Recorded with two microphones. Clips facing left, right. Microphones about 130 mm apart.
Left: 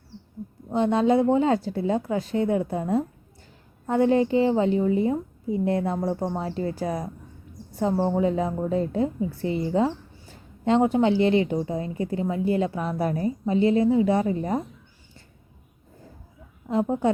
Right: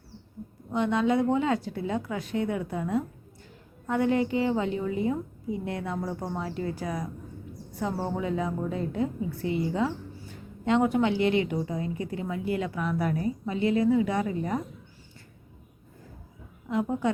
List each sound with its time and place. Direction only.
0.7 s a woman's voice: 30° left (ahead or behind)
16.6 s a woman's voice: 30° left (ahead or behind)